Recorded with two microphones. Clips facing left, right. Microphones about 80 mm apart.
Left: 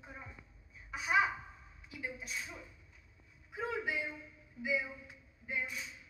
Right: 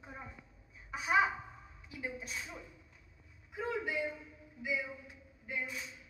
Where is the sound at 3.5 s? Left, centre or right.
Centre.